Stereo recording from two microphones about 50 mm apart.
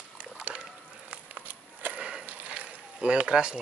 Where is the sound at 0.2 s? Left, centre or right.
Right.